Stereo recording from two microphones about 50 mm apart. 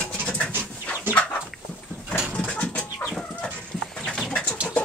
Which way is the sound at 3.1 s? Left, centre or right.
Centre.